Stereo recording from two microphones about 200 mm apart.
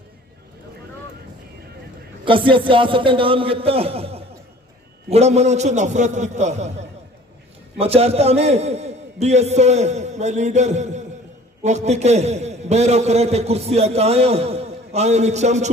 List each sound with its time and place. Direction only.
2.2 s a man's voice: 25° right (ahead or behind)